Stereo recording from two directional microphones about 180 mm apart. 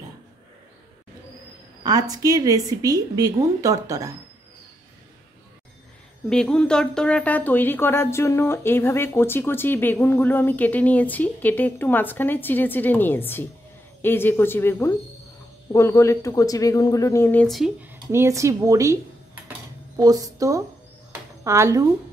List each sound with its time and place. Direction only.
1.8 s a woman's voice: 20° right (ahead or behind)
6.2 s speech: 5° left (ahead or behind)
18.1 s a woman's voice: 15° right (ahead or behind)